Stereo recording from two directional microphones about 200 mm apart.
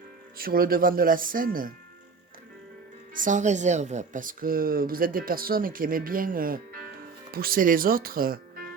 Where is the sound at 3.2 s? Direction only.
40° right (ahead or behind).